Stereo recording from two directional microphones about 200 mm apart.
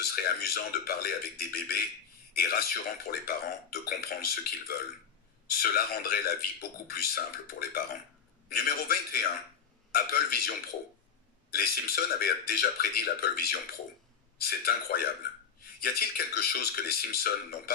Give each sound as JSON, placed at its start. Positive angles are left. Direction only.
{"t": 0.0, "sound": "a man's voice", "side_deg": 50}
{"t": 11.5, "sound": "a man's voice", "side_deg": 50}